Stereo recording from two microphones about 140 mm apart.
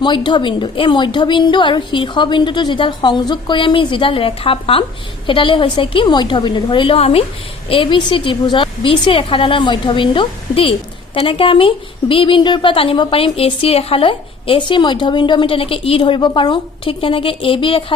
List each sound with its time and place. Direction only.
0.3 s a woman's voice: 35° left (ahead or behind)